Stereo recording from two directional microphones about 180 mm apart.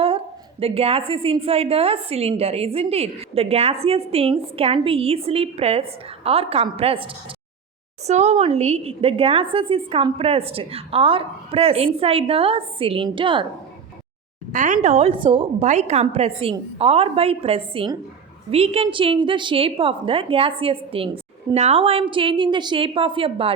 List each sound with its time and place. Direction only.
0.6 s a woman's voice: 30° right (ahead or behind)
14.5 s a woman's voice: 45° right (ahead or behind); by 15.6 s 30° right (ahead or behind)
15.6 s a woman's voice: 40° right (ahead or behind)